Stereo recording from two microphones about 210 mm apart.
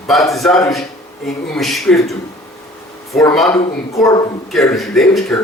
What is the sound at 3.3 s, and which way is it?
Speech, centre (ahead or behind).